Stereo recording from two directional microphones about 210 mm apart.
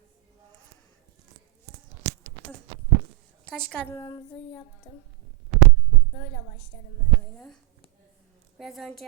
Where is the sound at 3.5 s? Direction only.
5° left (ahead or behind); by 5.0 s 20° left (ahead or behind).